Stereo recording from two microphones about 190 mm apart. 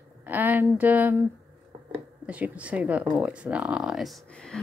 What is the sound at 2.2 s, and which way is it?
Speech, 5° right (ahead or behind).